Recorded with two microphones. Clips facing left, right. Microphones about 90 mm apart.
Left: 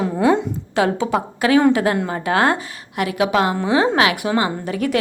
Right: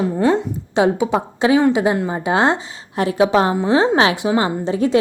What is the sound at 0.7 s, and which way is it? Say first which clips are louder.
A woman's voice: right 2 dB; 20° right (ahead or behind).